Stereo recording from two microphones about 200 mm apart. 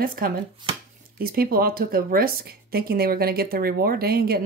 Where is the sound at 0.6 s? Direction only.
20° right (ahead or behind).